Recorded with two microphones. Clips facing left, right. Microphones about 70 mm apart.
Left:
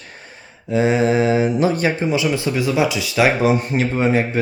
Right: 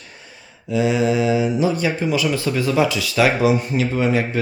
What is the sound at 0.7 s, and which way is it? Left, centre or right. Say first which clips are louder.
Speech: left 2 dB; left.